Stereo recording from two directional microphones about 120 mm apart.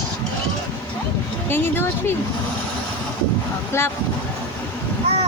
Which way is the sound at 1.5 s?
20° left (ahead or behind).